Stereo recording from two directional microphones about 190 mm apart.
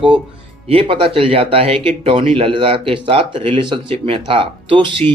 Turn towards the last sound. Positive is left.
turn(degrees=-25)  # may be behind; listen again after turning